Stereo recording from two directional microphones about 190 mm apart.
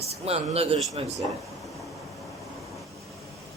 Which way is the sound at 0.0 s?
35° right (ahead or behind).